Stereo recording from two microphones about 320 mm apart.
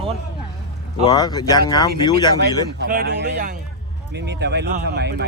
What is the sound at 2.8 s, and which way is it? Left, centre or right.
Speech, right.